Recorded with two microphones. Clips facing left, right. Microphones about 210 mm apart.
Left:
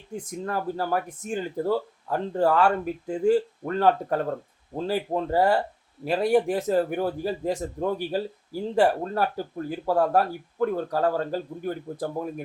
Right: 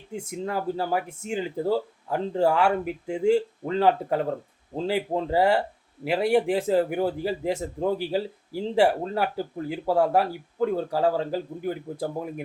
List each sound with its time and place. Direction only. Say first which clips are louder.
0.1 s speech: right 1 dB; 25° right (ahead or behind)
0.5 s speech: even; 15° right (ahead or behind)